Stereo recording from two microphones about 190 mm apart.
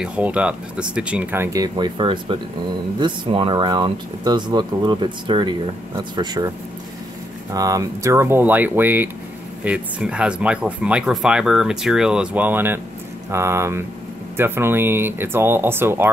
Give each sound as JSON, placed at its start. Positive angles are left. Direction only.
{"t": 0.0, "sound": "speech", "side_deg": -5}
{"t": 7.5, "sound": "speech", "side_deg": -20}